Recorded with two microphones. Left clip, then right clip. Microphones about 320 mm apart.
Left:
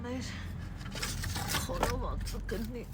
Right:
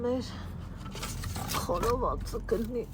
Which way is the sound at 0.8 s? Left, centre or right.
Centre.